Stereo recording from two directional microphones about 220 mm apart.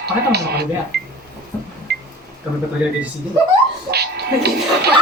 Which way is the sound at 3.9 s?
45° right (ahead or behind).